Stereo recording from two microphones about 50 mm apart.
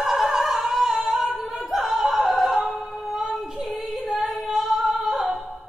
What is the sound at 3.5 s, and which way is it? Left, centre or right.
Female singing, centre.